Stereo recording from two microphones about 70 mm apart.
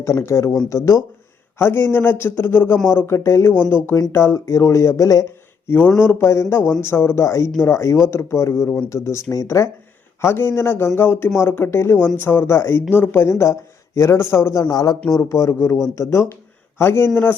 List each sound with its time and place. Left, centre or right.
0.2 s speech: left
1.5 s speech: left
5.6 s speech: left
10.2 s speech: left
14.5 s speech: left
15.3 s a man's voice: left